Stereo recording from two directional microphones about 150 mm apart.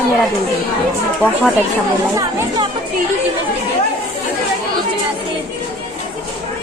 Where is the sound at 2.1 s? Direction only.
20° right (ahead or behind).